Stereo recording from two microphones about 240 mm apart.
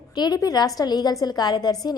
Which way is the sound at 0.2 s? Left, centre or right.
Centre.